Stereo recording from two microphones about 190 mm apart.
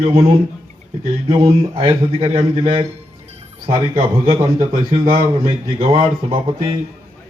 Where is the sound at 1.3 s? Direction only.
25° right (ahead or behind).